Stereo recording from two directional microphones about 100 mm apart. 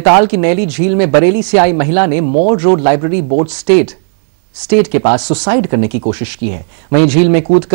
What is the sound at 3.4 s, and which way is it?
Speech, 10° left (ahead or behind).